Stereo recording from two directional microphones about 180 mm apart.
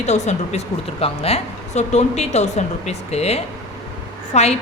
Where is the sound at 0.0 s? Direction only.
40° left (ahead or behind).